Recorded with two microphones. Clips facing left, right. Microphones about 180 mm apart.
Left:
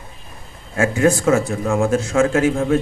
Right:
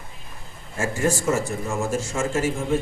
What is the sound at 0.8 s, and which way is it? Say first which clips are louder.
A man's voice: left 7 dB; 60° left (ahead or behind).